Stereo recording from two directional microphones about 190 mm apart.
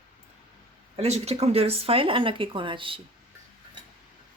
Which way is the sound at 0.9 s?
35° right (ahead or behind).